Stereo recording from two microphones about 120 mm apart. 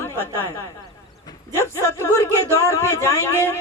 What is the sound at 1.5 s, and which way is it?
Speech, 25° left (ahead or behind).